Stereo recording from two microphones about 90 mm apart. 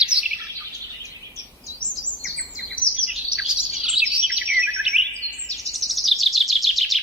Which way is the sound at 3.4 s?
5° right (ahead or behind).